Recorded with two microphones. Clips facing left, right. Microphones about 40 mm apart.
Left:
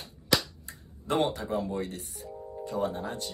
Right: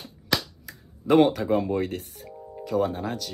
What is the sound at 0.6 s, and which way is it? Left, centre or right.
Finger snapping, right.